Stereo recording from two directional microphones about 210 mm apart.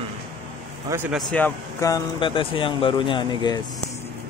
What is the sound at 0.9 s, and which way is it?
Speech, 10° right (ahead or behind).